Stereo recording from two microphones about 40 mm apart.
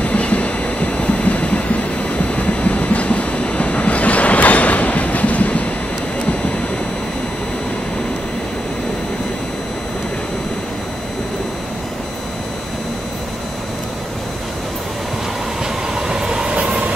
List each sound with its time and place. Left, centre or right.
0.0 s train: left
15.9 s train: centre
16.5 s vehicle: right